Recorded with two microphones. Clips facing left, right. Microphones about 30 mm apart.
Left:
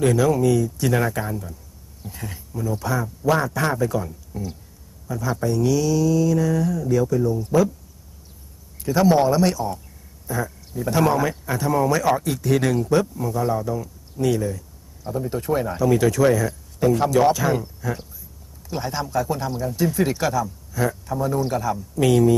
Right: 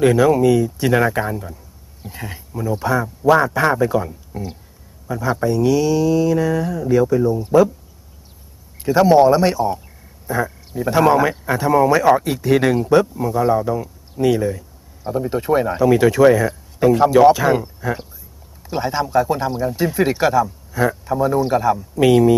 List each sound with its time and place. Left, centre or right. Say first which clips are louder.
0.0 s a man's voice: right 5 dB; right
8.8 s a man's voice: right 6 dB; right